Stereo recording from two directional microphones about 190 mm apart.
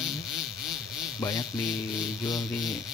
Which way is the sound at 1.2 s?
20° left (ahead or behind).